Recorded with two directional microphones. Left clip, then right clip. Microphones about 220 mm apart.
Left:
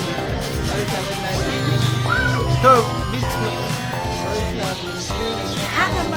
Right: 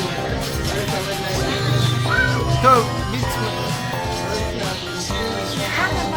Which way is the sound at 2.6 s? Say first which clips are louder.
Left 1 dB; centre (ahead or behind).